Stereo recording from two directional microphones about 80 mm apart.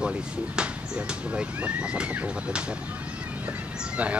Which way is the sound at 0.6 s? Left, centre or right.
Centre.